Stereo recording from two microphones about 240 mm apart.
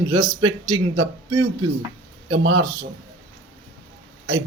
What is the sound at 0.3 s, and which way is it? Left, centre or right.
Speech, centre.